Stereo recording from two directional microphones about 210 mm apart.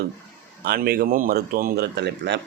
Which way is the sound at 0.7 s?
50° right (ahead or behind).